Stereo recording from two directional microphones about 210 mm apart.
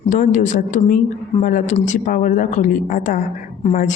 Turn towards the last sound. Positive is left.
turn(degrees=35)  # may be behind; listen again after turning